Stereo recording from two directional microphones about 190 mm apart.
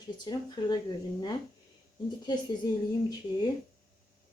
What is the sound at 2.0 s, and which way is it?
Speech, 20° left (ahead or behind).